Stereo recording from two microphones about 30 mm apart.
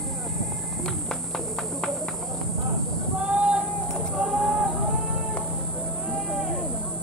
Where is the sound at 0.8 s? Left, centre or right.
Centre.